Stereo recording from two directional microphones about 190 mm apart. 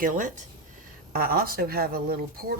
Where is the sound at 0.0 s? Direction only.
40° right (ahead or behind).